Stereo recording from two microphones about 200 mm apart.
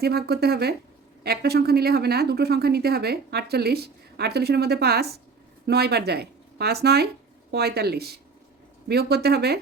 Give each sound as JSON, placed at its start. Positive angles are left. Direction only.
{"t": 0.0, "sound": "speech", "side_deg": -50}